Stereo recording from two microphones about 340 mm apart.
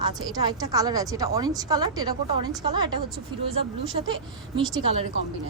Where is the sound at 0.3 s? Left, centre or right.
Centre.